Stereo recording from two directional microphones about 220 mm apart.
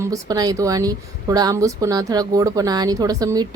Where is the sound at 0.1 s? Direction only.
15° right (ahead or behind).